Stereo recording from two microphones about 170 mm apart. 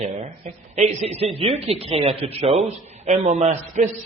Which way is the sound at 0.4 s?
40° right (ahead or behind).